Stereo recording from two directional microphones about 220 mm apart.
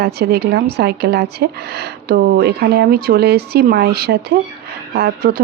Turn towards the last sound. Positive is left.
turn(degrees=-45)  # may be behind; listen again after turning